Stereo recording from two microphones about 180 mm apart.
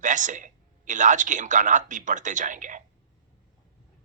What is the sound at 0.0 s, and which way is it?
A woman's voice, 45° right (ahead or behind).